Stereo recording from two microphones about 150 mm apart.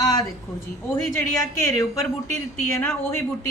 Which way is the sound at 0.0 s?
25° left (ahead or behind).